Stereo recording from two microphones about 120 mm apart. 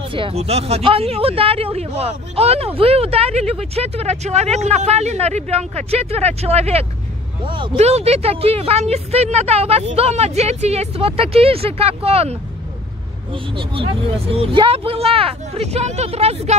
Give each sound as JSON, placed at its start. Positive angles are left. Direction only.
{"t": 0.1, "sound": "speech", "side_deg": -55}
{"t": 7.4, "sound": "speech", "side_deg": -45}
{"t": 7.7, "sound": "speech", "side_deg": -60}
{"t": 13.3, "sound": "speech", "side_deg": -45}